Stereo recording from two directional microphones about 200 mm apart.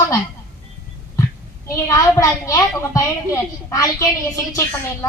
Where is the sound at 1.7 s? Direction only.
15° left (ahead or behind).